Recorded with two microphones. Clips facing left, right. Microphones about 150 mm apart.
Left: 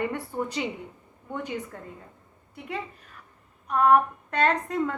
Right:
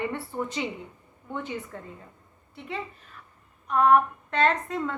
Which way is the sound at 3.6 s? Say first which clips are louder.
Even; 40° left (ahead or behind).